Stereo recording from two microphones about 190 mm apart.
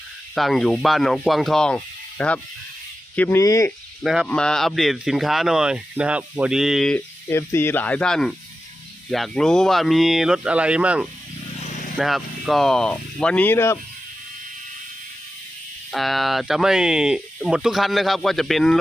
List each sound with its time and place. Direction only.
0.3 s speech: centre (ahead or behind); by 3.7 s 15° left (ahead or behind)
4.0 s speech: centre (ahead or behind)
11.6 s vehicle: 35° left (ahead or behind)
11.9 s speech: centre (ahead or behind)
15.9 s speech: centre (ahead or behind)